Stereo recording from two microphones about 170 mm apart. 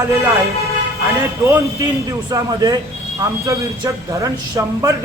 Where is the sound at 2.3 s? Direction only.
20° right (ahead or behind).